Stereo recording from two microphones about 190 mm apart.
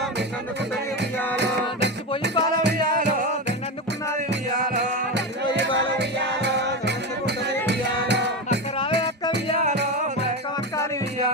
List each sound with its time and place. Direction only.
1.4 s music: 65° right (ahead or behind)
2.8 s music: 45° right (ahead or behind)
5.1 s music: 65° right (ahead or behind)